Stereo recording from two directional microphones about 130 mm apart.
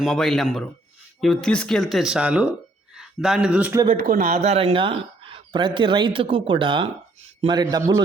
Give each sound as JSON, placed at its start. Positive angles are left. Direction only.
{"t": 0.0, "sound": "speech", "side_deg": 0}
{"t": 3.8, "sound": "speech", "side_deg": -90}
{"t": 4.4, "sound": "speech", "side_deg": -55}